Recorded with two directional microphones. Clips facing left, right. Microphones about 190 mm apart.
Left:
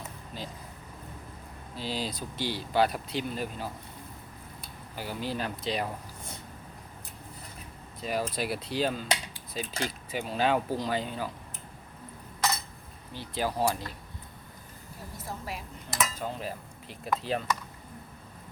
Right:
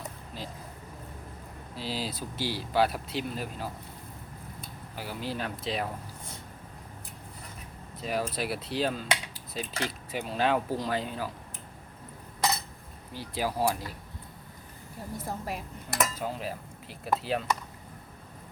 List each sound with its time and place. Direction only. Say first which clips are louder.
0.3 s a sound: left 1 dB; centre (ahead or behind)
1.7 s speech: left 1 dB; 5° right (ahead or behind)
4.9 s speech: left 1 dB; centre (ahead or behind)
8.0 s speech: even; centre (ahead or behind)
13.1 s speech: even; 10° right (ahead or behind)
15.4 s dishes: right 3 dB; 50° right (ahead or behind)
16.1 s speech: right 1 dB; 5° right (ahead or behind)